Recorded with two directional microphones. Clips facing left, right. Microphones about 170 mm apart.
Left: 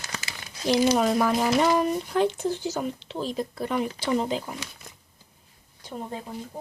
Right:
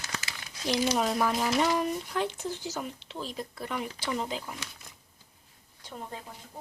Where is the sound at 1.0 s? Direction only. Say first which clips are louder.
Left 5 dB; 60° left (ahead or behind); by 4.5 s 30° left (ahead or behind).